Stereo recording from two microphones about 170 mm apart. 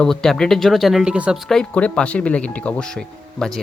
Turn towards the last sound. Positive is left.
turn(degrees=0)  # may be behind; listen again after turning